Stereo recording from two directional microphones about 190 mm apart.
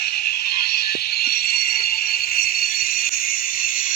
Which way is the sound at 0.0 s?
55° left (ahead or behind).